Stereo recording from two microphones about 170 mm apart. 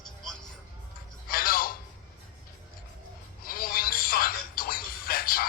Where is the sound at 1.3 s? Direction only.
60° left (ahead or behind).